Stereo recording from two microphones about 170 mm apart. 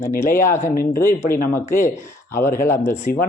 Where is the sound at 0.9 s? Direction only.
15° left (ahead or behind).